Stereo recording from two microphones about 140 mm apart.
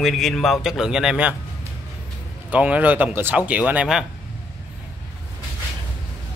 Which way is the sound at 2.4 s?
10° right (ahead or behind).